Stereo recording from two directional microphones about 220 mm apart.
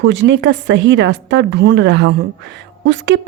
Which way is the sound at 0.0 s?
55° right (ahead or behind).